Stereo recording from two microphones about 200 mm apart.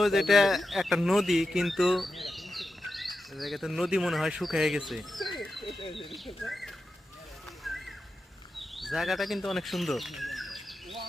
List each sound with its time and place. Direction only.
0.0 s speech: centre (ahead or behind)
5.4 s a sound: centre (ahead or behind)
5.8 s speech: 25° left (ahead or behind)
6.1 s speech: centre (ahead or behind)
7.6 s a sound: centre (ahead or behind)
8.5 s bird: centre (ahead or behind)